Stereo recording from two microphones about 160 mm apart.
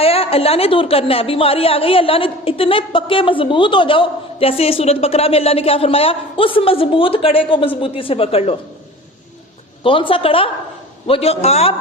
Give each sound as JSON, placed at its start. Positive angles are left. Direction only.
{"t": 0.0, "sound": "a woman's voice", "side_deg": 35}
{"t": 9.8, "sound": "a woman's voice", "side_deg": 35}